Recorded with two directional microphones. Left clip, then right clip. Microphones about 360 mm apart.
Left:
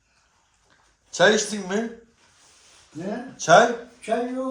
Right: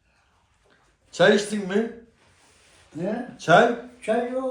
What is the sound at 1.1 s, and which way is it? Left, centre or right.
Speech, centre.